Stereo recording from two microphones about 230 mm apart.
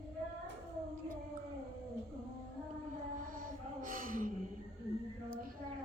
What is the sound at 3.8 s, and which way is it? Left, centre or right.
Gasp, right.